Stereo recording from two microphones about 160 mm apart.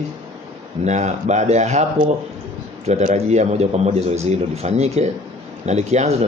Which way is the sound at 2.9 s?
45° right (ahead or behind).